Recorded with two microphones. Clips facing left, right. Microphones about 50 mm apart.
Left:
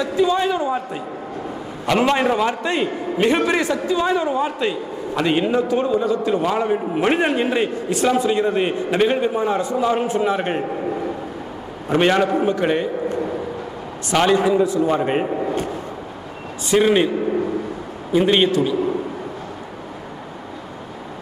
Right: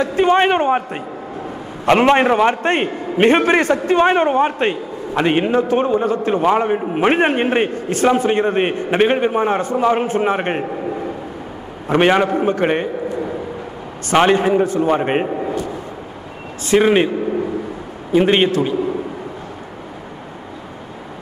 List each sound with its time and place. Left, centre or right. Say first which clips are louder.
0.0 s a man's voice: right 4 dB; right
1.9 s a man's voice: right 5 dB; right
11.9 s a man's voice: right 3 dB; right
12.4 s a man's voice: right 2 dB; right
14.1 s a man's voice: right 3 dB; right
14.4 s a man's voice: right 1 dB; right
15.2 s a sound: right 1 dB; centre
16.7 s a man's voice: right 2 dB; right
18.1 s a man's voice: right 2 dB; right